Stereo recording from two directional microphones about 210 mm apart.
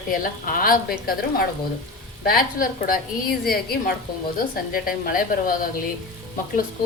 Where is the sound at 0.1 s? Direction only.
40° left (ahead or behind).